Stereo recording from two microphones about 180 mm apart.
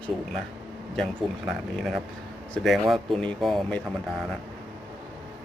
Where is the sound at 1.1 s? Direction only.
5° right (ahead or behind).